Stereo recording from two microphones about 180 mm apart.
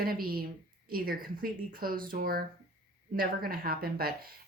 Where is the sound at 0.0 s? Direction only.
55° right (ahead or behind).